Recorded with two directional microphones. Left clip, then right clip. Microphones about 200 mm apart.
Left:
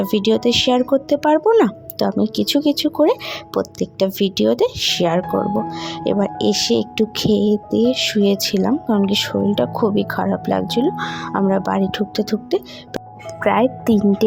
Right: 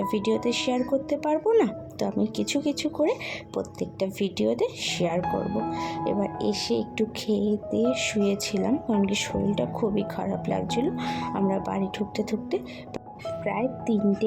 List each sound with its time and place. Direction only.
0.0 s speech: 25° left (ahead or behind)
5.3 s speech: 55° left (ahead or behind)
5.7 s speech: 25° left (ahead or behind)